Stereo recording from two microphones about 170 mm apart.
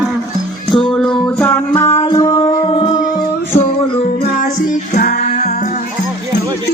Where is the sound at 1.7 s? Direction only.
15° left (ahead or behind).